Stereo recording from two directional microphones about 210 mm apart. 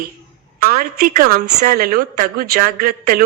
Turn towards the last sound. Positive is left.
turn(degrees=-45)  # may be behind; listen again after turning